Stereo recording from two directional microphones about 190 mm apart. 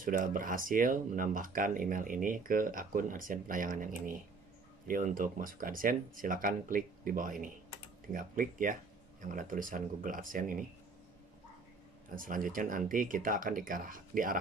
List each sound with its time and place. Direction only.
0.0 s speech: 45° right (ahead or behind)
12.2 s speech: 45° right (ahead or behind)